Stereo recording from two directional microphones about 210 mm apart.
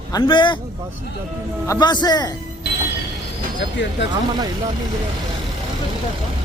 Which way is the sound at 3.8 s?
60° left (ahead or behind).